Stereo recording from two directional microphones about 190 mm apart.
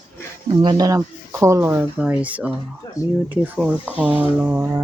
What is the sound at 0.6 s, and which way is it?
Speech, 20° right (ahead or behind).